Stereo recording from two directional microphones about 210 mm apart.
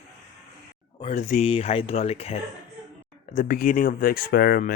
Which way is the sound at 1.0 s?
35° left (ahead or behind).